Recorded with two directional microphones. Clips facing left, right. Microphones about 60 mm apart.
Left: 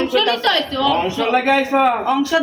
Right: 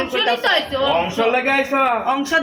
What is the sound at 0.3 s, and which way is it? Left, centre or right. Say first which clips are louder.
Speech: even; right.